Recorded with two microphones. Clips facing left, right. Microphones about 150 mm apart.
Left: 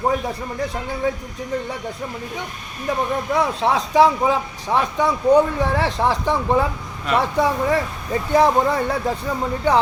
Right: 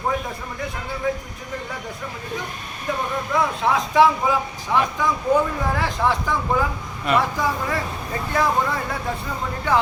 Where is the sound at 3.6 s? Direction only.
35° left (ahead or behind).